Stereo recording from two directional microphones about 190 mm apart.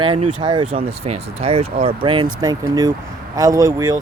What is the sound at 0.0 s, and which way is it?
Speech, 25° right (ahead or behind).